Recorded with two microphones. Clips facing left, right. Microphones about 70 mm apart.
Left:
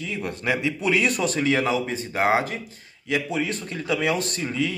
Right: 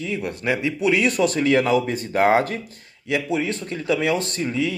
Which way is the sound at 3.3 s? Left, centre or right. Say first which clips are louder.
Right 3 dB; left.